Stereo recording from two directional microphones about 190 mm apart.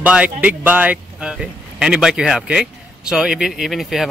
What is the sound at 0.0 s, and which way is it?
Speech, 5° right (ahead or behind).